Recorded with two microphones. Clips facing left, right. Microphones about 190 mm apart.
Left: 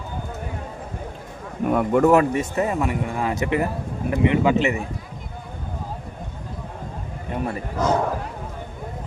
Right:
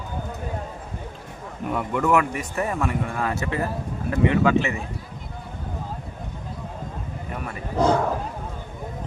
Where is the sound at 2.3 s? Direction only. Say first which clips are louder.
Left 4 dB; 25° left (ahead or behind).